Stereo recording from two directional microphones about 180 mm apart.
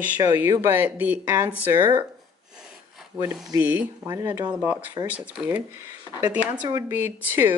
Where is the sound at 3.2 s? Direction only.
5° right (ahead or behind).